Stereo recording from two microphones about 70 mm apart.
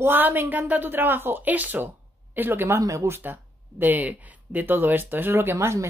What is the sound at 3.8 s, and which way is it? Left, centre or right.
Speech, right.